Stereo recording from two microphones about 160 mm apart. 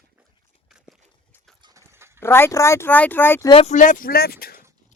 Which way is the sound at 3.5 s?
40° left (ahead or behind).